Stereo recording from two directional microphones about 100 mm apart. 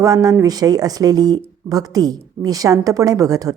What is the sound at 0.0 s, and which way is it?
A woman's voice, 35° right (ahead or behind).